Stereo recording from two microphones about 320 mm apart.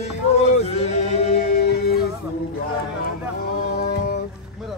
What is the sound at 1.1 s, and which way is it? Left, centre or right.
Music, left.